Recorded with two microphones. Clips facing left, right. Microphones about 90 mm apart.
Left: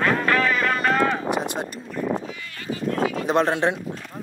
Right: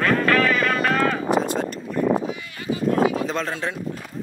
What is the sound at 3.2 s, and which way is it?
Speech, 20° left (ahead or behind).